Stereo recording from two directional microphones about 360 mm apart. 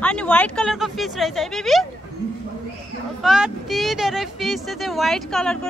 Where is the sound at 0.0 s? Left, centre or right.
Centre.